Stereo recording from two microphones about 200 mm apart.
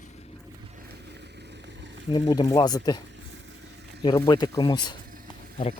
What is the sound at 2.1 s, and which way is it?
Speech, 20° left (ahead or behind).